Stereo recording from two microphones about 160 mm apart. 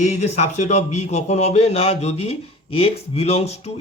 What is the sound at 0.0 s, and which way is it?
Speech, 45° left (ahead or behind).